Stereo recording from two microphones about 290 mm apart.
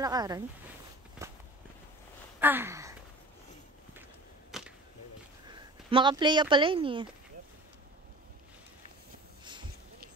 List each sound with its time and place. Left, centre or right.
0.0 s speech: centre
1.2 s walk: centre
2.4 s a sound: centre
4.5 s arrow: centre
5.5 s speech: centre
9.4 s a sound: centre